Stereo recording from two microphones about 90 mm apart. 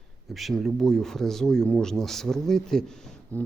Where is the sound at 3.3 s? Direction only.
15° left (ahead or behind).